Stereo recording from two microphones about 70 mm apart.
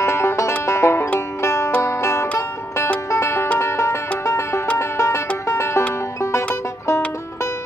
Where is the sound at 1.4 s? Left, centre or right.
Left.